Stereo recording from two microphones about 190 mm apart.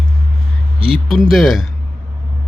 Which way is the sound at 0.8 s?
30° right (ahead or behind).